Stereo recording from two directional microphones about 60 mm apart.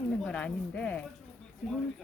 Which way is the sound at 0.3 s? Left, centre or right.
Left.